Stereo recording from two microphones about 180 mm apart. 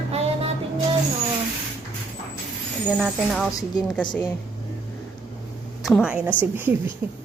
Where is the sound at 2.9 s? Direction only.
Centre (ahead or behind).